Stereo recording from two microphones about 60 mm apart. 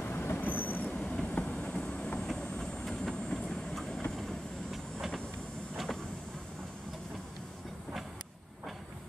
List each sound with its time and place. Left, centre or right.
0.1 s train: left; by 1.9 s centre
2.0 s vehicle: centre
4.2 s train: centre